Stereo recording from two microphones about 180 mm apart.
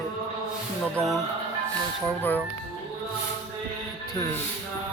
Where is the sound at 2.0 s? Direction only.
10° left (ahead or behind).